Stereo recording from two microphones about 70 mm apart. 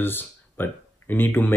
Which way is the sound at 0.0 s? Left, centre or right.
Left.